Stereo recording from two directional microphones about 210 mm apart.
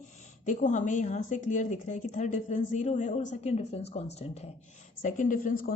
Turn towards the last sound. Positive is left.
turn(degrees=40)  # may be behind; listen again after turning